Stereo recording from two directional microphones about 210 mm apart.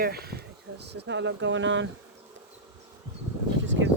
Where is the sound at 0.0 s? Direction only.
50° right (ahead or behind).